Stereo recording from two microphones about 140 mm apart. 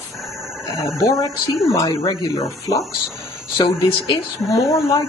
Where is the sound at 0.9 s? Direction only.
25° left (ahead or behind).